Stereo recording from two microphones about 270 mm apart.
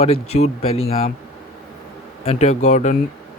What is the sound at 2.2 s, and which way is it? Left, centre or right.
Speech, left.